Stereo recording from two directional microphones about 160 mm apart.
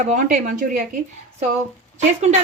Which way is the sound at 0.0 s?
55° right (ahead or behind).